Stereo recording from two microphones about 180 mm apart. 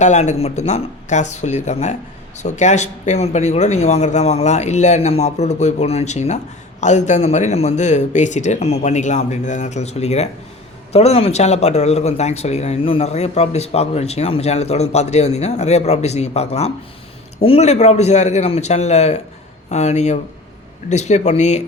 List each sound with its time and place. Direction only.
0.0 s speech: 40° left (ahead or behind)